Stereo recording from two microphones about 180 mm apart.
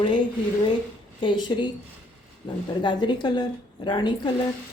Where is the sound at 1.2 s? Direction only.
25° left (ahead or behind).